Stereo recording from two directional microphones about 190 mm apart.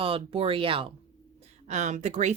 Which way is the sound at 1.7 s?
40° right (ahead or behind).